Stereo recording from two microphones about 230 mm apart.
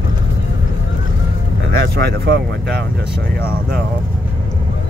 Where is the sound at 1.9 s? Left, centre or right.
Right.